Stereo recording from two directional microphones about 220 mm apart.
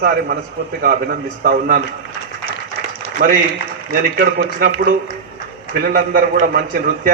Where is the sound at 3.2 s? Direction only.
45° right (ahead or behind).